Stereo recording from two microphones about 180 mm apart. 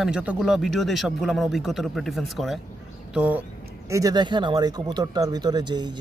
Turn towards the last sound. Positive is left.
turn(degrees=-25)  # may be behind; listen again after turning